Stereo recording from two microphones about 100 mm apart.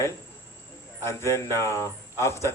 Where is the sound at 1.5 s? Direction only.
30° left (ahead or behind).